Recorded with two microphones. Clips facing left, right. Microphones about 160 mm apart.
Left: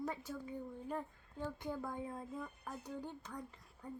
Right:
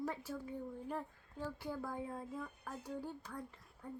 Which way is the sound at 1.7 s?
20° left (ahead or behind).